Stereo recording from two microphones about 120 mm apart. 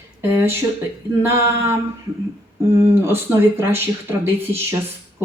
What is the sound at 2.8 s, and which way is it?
A man's voice, 20° right (ahead or behind).